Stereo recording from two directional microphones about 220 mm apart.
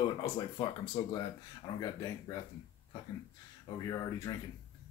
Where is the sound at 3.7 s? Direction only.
15° left (ahead or behind).